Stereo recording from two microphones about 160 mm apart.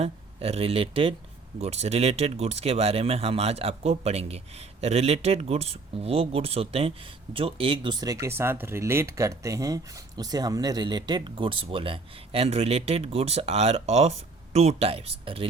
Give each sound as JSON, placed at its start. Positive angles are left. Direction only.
{"t": 0.0, "sound": "speech", "side_deg": -40}